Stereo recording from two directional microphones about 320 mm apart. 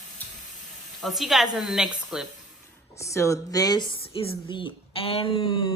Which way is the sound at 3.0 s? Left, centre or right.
Centre.